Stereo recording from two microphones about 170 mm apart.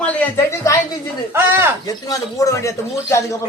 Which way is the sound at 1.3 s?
15° right (ahead or behind).